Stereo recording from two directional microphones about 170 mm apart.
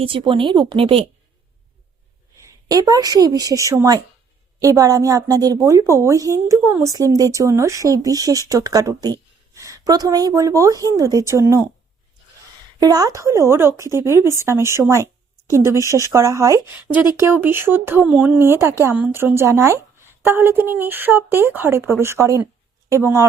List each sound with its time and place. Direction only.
0.0 s speech: 30° right (ahead or behind)
2.6 s speech: 20° right (ahead or behind)
12.8 s a woman's voice: 20° right (ahead or behind)